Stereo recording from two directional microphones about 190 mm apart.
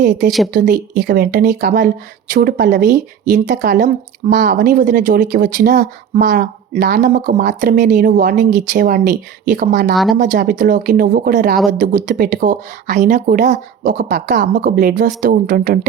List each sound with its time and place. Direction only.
0.3 s speech: centre (ahead or behind)
0.5 s speech: 45° right (ahead or behind)
0.9 s speech: 55° right (ahead or behind)
4.3 s speech: 60° right (ahead or behind)
4.5 s speech: 45° right (ahead or behind)
9.9 s speech: centre (ahead or behind)
10.2 s speech: 45° right (ahead or behind)